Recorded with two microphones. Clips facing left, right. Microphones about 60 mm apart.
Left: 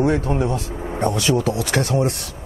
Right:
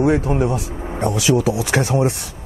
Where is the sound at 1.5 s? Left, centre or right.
Centre.